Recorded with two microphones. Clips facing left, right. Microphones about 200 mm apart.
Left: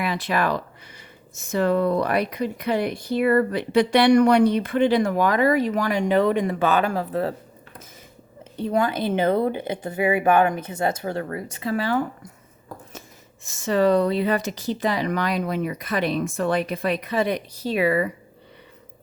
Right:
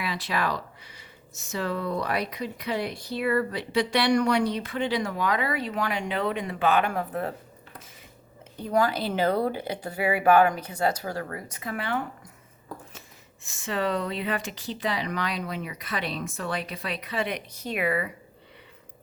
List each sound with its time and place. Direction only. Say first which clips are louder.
0.0 s speech: left 5 dB; 50° left (ahead or behind); by 7.3 s 30° left (ahead or behind)
8.5 s speech: left 2 dB; 25° left (ahead or behind)
13.4 s speech: left 9 dB; 40° left (ahead or behind)